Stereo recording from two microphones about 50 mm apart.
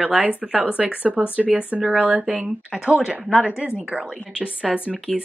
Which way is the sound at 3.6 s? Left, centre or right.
Right.